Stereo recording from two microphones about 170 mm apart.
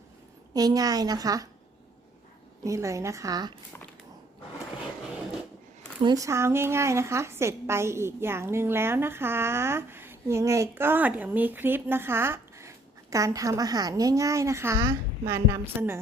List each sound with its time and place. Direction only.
0.5 s a woman's voice: 20° right (ahead or behind)
2.6 s a woman's voice: 20° right (ahead or behind)
6.0 s a woman's voice: 25° right (ahead or behind)